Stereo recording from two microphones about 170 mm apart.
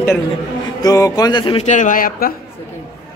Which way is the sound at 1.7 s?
45° left (ahead or behind).